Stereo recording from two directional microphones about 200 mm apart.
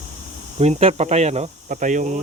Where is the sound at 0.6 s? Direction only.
30° right (ahead or behind).